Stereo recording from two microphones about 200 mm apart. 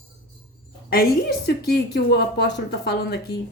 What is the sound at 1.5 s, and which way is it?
A woman's voice, 50° left (ahead or behind).